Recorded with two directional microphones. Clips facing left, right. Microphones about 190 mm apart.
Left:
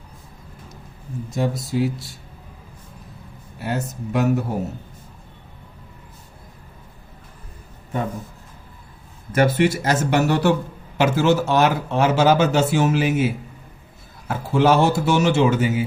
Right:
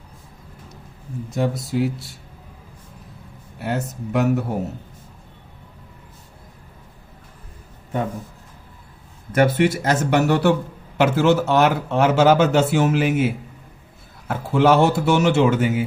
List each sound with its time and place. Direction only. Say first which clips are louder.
1.3 s a man's voice: right 1 dB; 60° right (ahead or behind)
3.6 s a man's voice: right 1 dB; 60° right (ahead or behind)
9.3 s a man's voice: even; 60° right (ahead or behind)